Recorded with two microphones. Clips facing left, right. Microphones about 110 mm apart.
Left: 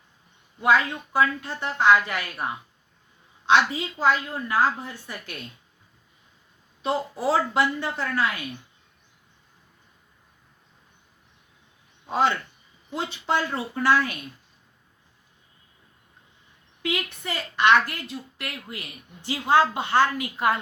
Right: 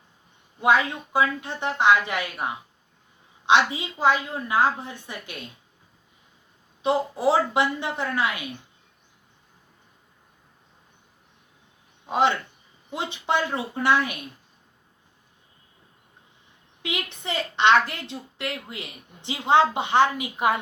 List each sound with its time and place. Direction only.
0.6 s a woman's voice: 20° right (ahead or behind)
6.8 s a woman's voice: 25° right (ahead or behind)
12.0 s a man's voice: 20° right (ahead or behind)
16.8 s a woman's voice: 20° right (ahead or behind)